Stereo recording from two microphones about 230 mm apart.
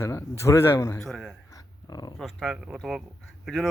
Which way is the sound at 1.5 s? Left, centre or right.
Centre.